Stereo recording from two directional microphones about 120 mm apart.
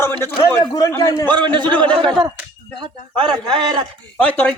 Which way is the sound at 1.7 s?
10° left (ahead or behind).